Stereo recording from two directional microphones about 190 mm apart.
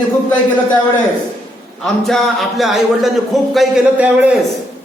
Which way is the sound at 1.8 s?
Centre (ahead or behind).